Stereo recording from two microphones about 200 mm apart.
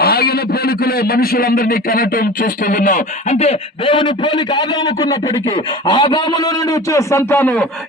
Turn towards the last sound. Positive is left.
turn(degrees=10)  # may be behind; listen again after turning